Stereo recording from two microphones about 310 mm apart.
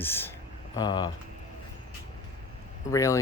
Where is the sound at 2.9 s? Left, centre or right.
Centre.